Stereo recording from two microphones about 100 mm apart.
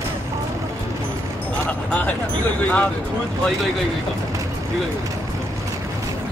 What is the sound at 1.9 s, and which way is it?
Speech, 15° left (ahead or behind).